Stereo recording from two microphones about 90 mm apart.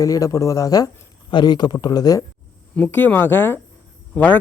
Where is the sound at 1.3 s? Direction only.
60° left (ahead or behind).